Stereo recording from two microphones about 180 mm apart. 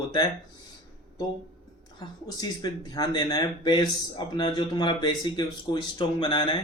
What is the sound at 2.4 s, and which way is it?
Speech, 20° left (ahead or behind).